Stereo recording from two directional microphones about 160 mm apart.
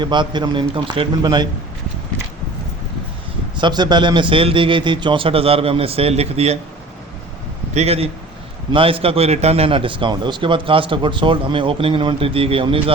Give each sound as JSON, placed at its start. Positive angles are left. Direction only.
{"t": 0.0, "sound": "a man's voice", "side_deg": -30}
{"t": 3.6, "sound": "a man's voice", "side_deg": -25}
{"t": 7.7, "sound": "a man's voice", "side_deg": -40}